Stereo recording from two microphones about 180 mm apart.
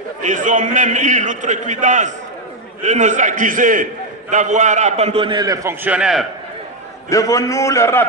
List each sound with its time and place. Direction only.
0.2 s a man's voice: 45° right (ahead or behind); by 6.2 s 5° right (ahead or behind)
7.1 s a man's voice: 20° left (ahead or behind)